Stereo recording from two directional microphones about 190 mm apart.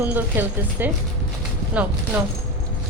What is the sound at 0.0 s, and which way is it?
Speech, 10° right (ahead or behind).